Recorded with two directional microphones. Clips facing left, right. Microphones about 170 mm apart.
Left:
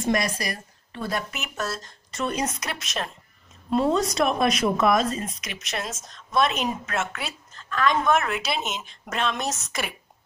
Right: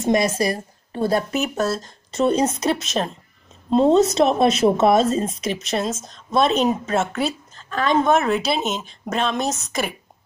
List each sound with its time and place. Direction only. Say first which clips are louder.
0.0 s a woman's voice: right 6 dB; 25° right (ahead or behind)